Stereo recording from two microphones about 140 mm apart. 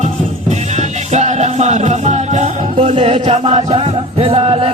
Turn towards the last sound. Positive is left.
turn(degrees=-45)  # may be behind; listen again after turning